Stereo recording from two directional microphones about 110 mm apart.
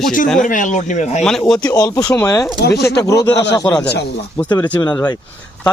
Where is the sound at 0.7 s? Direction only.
90° left.